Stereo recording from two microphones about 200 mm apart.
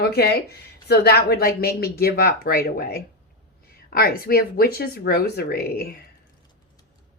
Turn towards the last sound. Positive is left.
turn(degrees=50)  # may be behind; listen again after turning